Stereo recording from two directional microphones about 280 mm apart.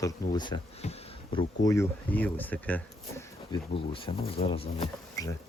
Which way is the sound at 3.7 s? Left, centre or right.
Centre.